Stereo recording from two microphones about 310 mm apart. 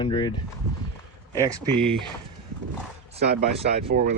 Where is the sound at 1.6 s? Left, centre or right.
Right.